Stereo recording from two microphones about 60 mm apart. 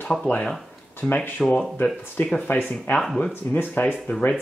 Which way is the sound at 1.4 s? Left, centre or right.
Centre.